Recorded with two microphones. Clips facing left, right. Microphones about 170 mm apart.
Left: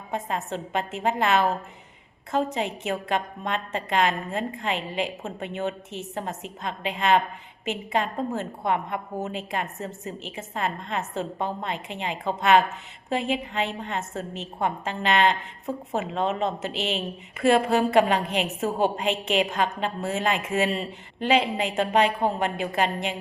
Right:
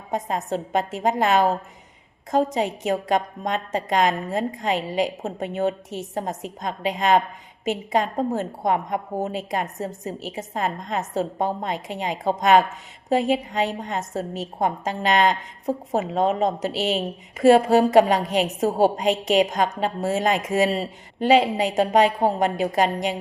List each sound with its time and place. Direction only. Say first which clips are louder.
0.1 s a woman's voice: right 4 dB; 40° right (ahead or behind)